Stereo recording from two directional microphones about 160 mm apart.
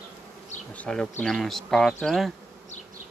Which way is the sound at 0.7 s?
5° left (ahead or behind).